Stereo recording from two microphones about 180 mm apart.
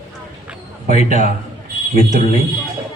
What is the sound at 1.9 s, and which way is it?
Speech, 35° left (ahead or behind).